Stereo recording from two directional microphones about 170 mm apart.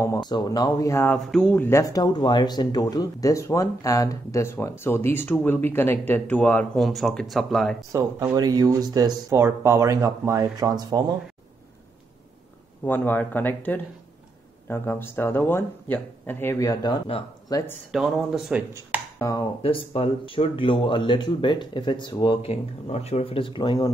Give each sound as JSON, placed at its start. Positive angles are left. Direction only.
{"t": 0.0, "sound": "speech", "side_deg": 20}
{"t": 1.1, "sound": "speech", "side_deg": 5}
{"t": 7.9, "sound": "speech", "side_deg": -15}
{"t": 12.8, "sound": "speech", "side_deg": 10}
{"t": 17.9, "sound": "speech", "side_deg": 0}
{"t": 19.1, "sound": "speech", "side_deg": 20}
{"t": 19.6, "sound": "speech", "side_deg": 30}